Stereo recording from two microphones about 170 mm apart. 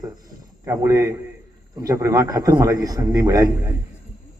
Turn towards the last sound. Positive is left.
turn(degrees=-20)  # may be behind; listen again after turning